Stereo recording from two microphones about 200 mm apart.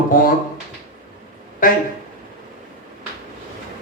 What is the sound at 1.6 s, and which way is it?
Speech, 45° left (ahead or behind).